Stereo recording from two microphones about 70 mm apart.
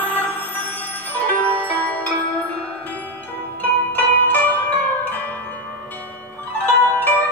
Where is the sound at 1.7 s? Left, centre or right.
Left.